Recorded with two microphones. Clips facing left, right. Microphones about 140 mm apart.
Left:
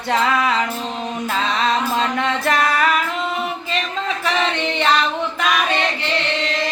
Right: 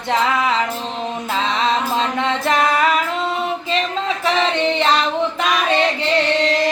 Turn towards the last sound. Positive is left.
turn(degrees=-30)  # may be behind; listen again after turning